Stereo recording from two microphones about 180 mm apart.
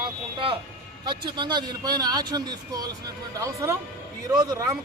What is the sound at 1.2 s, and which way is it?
A man's voice, 25° right (ahead or behind).